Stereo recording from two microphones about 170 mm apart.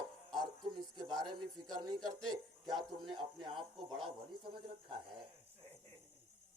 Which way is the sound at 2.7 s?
Centre (ahead or behind).